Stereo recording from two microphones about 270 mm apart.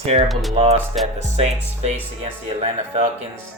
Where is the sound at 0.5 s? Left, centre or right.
Right.